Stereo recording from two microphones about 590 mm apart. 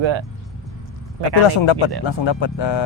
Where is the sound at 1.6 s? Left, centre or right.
Left.